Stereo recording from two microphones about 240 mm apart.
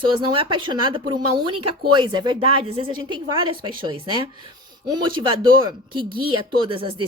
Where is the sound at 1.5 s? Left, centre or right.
Right.